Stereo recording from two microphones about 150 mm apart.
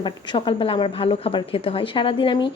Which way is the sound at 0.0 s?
35° left (ahead or behind).